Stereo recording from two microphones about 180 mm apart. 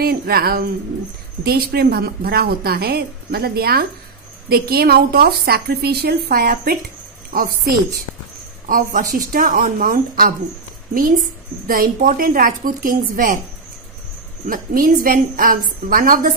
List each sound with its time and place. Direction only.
0.0 s a woman's voice: 55° right (ahead or behind)
14.5 s a woman's voice: 50° right (ahead or behind)